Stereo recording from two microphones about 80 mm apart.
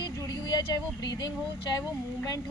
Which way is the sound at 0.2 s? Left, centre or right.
Left.